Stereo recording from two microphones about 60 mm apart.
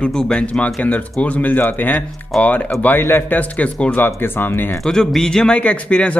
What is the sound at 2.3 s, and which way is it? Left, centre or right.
Speech, centre.